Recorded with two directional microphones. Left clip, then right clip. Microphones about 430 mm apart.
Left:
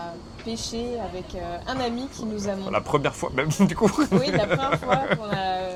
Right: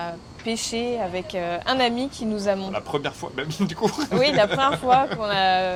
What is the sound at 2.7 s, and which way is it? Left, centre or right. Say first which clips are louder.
Speech: left 3 dB; left.